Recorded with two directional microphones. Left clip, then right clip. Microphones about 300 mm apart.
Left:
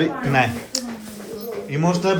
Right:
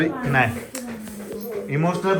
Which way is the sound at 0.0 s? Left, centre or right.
Centre.